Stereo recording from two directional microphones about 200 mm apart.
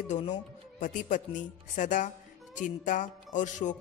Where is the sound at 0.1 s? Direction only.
35° left (ahead or behind).